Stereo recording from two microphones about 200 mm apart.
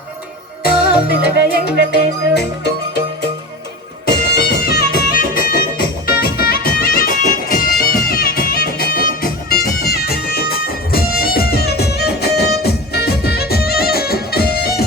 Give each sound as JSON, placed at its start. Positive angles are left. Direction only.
{"t": 0.8, "sound": "music", "side_deg": 50}
{"t": 4.3, "sound": "music", "side_deg": 50}